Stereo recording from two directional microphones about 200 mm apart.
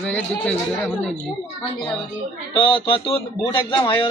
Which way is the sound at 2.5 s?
25° left (ahead or behind).